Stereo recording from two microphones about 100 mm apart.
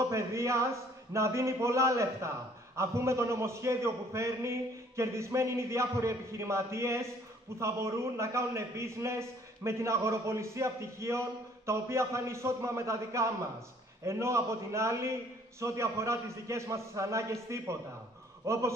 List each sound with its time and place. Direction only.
0.1 s a man's voice: 30° right (ahead or behind)